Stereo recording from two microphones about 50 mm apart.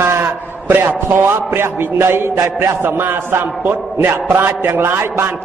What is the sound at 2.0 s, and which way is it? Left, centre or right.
A man's voice, right.